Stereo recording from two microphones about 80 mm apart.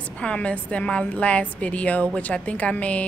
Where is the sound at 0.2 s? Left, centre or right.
Centre.